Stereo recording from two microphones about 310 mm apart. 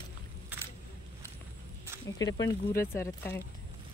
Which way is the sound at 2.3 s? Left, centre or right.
Centre.